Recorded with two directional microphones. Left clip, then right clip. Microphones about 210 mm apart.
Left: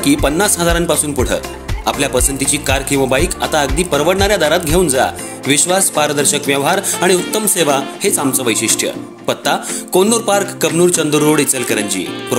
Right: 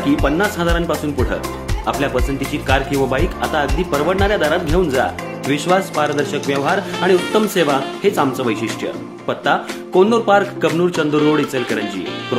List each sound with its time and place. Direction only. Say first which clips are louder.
0.0 s speech: left 3 dB; 35° left (ahead or behind)